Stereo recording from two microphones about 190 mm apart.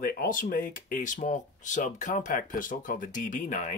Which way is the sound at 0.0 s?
50° left (ahead or behind).